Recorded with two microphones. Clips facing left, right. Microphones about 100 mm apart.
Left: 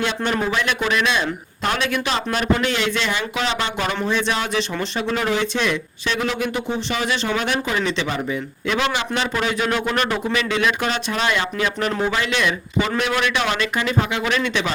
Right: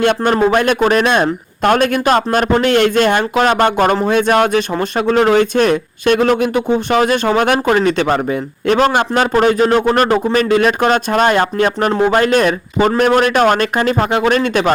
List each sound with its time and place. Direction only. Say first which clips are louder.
0.0 s speech: right 9 dB; 55° right (ahead or behind)